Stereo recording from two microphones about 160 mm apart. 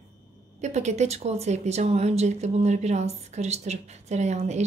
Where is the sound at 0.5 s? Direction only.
45° right (ahead or behind).